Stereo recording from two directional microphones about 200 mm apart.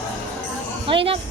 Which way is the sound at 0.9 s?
25° right (ahead or behind).